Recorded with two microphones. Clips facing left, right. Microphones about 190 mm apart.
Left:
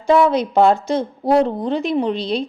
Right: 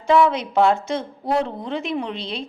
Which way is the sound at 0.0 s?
40° left (ahead or behind).